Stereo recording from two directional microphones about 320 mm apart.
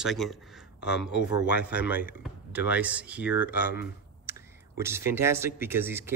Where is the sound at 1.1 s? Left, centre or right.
Left.